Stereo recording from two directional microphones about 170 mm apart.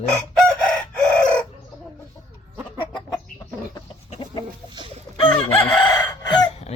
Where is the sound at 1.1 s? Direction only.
5° left (ahead or behind).